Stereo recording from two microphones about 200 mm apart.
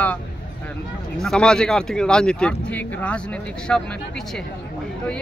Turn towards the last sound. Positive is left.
turn(degrees=5)  # may be behind; listen again after turning